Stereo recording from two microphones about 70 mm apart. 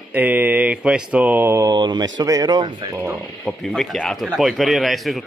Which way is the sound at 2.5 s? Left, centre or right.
Right.